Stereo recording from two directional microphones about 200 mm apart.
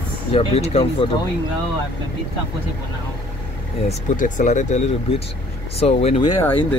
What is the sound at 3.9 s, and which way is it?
Speech, 40° left (ahead or behind).